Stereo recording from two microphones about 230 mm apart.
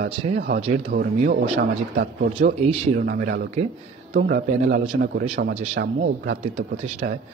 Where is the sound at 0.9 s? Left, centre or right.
Right.